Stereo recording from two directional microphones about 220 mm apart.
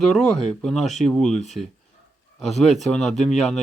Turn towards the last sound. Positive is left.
turn(degrees=30)  # may be behind; listen again after turning